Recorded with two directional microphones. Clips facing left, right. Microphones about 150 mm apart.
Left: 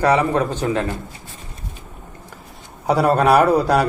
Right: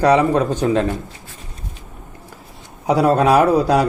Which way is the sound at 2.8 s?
10° right (ahead or behind).